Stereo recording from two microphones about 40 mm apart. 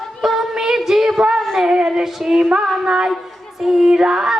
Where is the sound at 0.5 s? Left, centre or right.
Centre.